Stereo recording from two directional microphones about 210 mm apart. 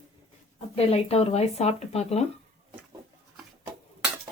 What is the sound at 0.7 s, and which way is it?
A woman's voice, 30° left (ahead or behind).